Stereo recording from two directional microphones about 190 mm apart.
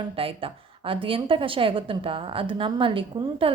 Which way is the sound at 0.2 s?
30° right (ahead or behind).